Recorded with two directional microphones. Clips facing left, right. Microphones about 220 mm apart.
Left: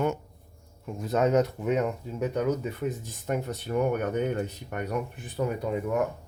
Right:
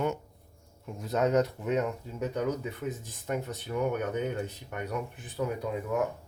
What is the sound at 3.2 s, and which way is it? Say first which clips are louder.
Speech: left 3 dB; 60° left (ahead or behind).